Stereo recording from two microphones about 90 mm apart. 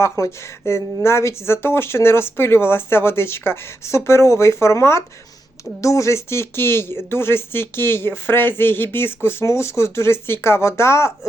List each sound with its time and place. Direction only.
0.0 s speech: 30° left (ahead or behind)